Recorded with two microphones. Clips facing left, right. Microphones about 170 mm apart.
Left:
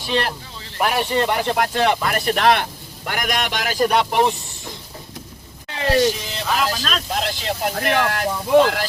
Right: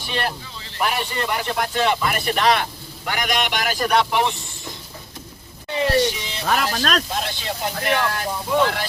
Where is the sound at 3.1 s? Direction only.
45° left (ahead or behind).